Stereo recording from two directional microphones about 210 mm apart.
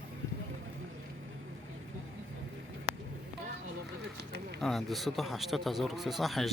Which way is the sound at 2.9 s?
30° left (ahead or behind).